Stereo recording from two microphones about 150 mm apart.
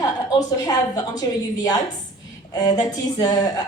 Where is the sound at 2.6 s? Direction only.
25° left (ahead or behind).